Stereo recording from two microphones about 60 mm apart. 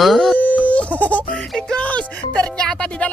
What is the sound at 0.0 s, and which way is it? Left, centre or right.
Speech, centre.